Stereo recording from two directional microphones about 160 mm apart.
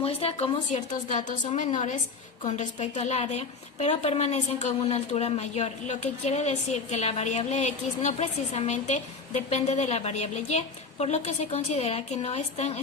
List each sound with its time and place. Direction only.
0.0 s a woman's voice: 40° left (ahead or behind)